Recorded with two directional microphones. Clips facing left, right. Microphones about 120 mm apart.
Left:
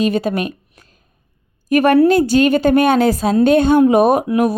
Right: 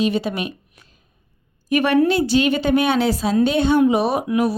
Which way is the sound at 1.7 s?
45° left (ahead or behind).